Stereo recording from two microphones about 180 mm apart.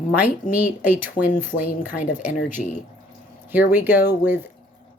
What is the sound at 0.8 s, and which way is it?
Speech, 10° right (ahead or behind).